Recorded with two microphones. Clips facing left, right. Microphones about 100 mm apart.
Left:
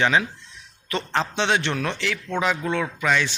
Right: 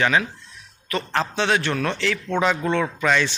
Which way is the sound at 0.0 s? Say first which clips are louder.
Even; 20° left (ahead or behind).